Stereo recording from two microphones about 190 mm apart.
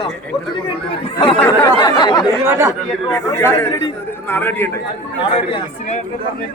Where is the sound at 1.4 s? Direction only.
15° left (ahead or behind).